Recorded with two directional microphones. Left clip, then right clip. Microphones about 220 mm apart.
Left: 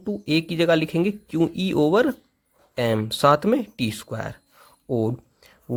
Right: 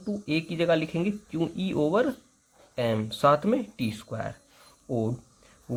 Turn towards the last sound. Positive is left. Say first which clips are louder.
# left 5 dB
turn(degrees=40)  # may be behind; listen again after turning